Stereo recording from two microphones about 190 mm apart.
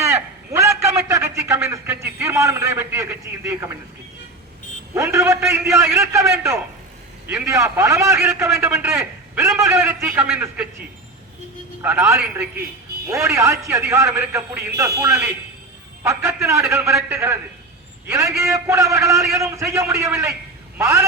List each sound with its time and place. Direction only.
0.0 s a sound: 15° right (ahead or behind)
4.9 s a man's voice: 15° right (ahead or behind)
11.8 s a man's voice: 10° right (ahead or behind)